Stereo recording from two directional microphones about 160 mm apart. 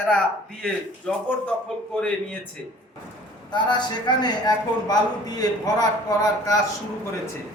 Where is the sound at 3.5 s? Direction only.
30° left (ahead or behind).